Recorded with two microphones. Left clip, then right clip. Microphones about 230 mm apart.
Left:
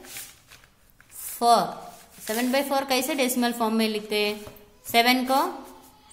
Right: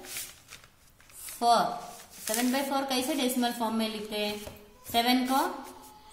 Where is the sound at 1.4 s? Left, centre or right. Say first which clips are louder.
Left 4 dB; left.